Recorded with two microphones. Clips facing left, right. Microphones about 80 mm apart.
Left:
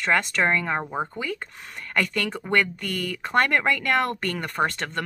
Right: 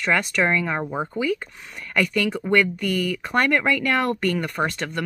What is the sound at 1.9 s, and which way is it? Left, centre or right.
Speech, left.